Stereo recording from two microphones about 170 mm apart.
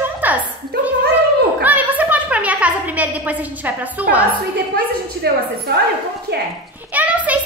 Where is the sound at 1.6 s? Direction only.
10° right (ahead or behind).